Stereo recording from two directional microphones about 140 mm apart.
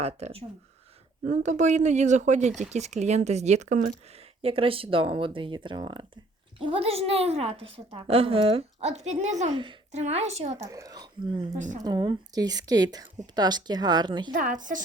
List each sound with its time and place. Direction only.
0.0 s a woman's voice: 45° right (ahead or behind)
1.3 s a woman's voice: 60° right (ahead or behind)
4.4 s a woman's voice: 40° right (ahead or behind)
10.7 s a woman's voice: 25° right (ahead or behind)
11.5 s speech: 60° right (ahead or behind)
11.8 s a woman's voice: 30° right (ahead or behind)
14.3 s speech: 70° right (ahead or behind)